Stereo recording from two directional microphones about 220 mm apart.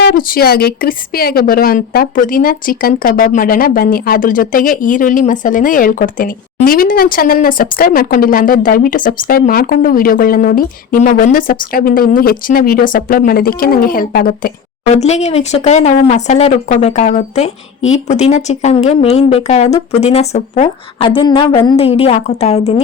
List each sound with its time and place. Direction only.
0.0 s a woman's voice: 40° left (ahead or behind)
14.9 s speech: 30° left (ahead or behind)